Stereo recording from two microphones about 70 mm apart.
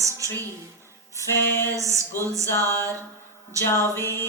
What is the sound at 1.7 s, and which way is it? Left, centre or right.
Speech, right.